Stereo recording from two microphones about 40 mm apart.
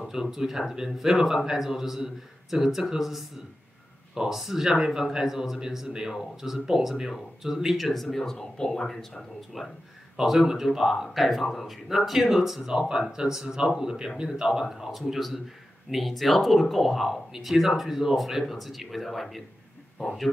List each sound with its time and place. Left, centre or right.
0.1 s speech: centre
7.8 s speech: centre
9.6 s speech: centre